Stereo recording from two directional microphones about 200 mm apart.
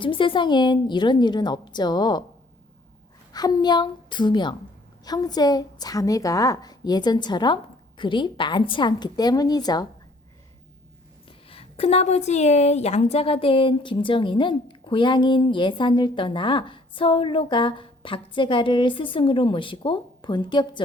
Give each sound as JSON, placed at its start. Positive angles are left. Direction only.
{"t": 0.0, "sound": "a woman's voice", "side_deg": 25}
{"t": 3.3, "sound": "a woman's voice", "side_deg": 20}
{"t": 11.3, "sound": "a woman's voice", "side_deg": 30}